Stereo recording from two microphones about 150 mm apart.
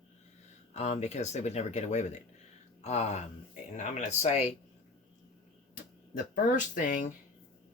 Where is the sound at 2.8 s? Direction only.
50° left (ahead or behind).